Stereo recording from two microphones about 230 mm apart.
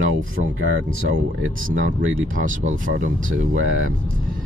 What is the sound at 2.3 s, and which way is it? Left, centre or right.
Speech, right.